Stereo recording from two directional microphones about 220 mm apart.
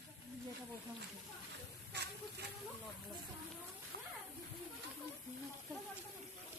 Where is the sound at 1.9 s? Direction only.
50° right (ahead or behind).